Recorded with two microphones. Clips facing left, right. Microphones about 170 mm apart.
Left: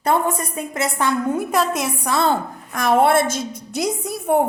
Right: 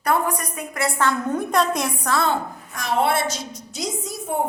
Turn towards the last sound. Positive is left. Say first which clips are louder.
# left 8 dB
turn(degrees=60)  # may be behind; listen again after turning